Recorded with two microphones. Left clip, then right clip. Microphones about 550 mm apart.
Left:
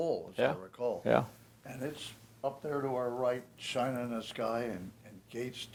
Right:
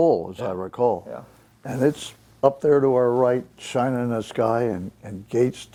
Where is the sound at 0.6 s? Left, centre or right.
Right.